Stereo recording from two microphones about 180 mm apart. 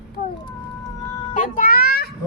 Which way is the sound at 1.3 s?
50° left (ahead or behind).